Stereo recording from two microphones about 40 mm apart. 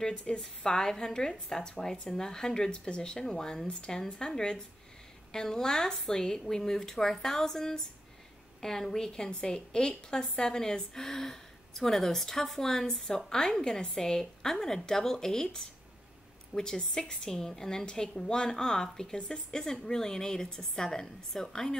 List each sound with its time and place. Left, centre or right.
0.4 s a woman's voice: centre